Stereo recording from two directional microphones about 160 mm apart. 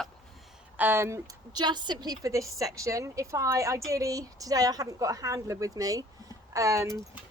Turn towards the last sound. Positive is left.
turn(degrees=-20)  # may be behind; listen again after turning